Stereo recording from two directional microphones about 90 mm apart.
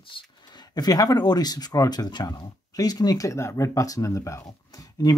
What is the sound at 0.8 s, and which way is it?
Speech, 45° left (ahead or behind).